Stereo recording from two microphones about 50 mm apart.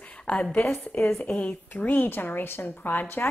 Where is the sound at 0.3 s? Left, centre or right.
Left.